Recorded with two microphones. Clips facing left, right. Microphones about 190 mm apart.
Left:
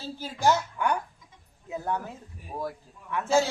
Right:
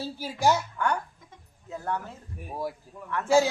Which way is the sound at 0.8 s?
15° left (ahead or behind).